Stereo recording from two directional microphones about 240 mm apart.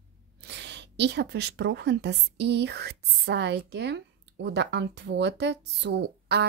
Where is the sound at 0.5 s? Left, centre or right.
Right.